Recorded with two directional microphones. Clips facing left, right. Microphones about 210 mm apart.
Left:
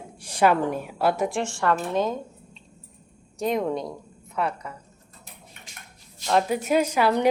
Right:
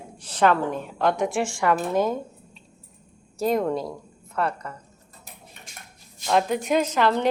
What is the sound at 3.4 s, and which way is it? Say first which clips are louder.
A woman's voice: right 2 dB; centre (ahead or behind).